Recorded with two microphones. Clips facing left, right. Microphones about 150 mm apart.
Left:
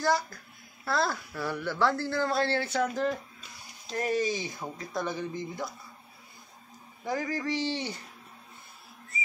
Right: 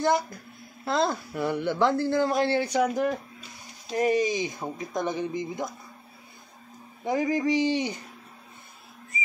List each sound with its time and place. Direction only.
0.0 s speech: 20° right (ahead or behind)
7.1 s speech: 20° right (ahead or behind)